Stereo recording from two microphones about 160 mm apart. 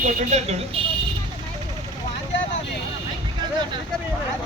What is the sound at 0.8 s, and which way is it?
Music, 35° right (ahead or behind).